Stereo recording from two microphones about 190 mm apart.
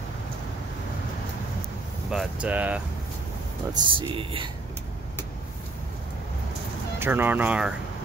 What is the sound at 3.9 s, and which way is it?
Speech, 25° right (ahead or behind).